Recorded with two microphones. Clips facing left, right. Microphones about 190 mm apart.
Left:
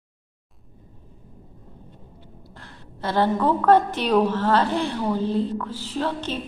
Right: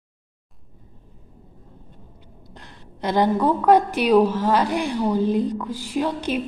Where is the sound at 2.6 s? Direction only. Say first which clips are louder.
Right 3 dB; 15° right (ahead or behind).